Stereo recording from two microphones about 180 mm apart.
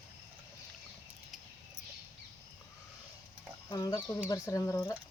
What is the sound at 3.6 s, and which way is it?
Speech, 20° left (ahead or behind).